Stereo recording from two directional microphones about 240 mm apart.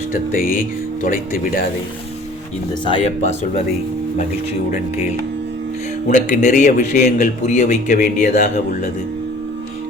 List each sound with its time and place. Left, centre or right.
0.3 s a man's voice: left
2.8 s speech: left
6.1 s a man's voice: left